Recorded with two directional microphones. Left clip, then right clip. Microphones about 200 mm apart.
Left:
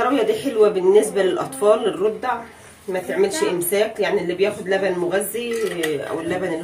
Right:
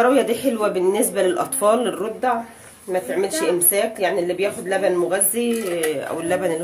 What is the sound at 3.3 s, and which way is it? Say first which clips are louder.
Speech: even; 35° right (ahead or behind).